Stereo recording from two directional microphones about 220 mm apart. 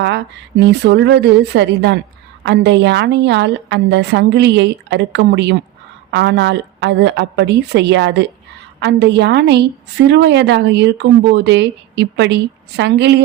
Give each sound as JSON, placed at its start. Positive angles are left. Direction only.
{"t": 0.0, "sound": "a woman's voice", "side_deg": -50}